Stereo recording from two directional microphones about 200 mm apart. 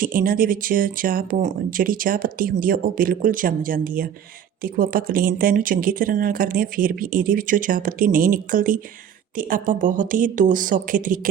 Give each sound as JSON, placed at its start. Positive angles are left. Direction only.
{"t": 0.0, "sound": "speech", "side_deg": -45}